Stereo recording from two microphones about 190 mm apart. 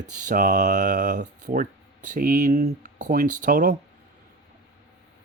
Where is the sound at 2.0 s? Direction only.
45° right (ahead or behind).